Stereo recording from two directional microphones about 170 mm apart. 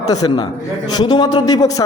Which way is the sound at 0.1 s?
25° left (ahead or behind).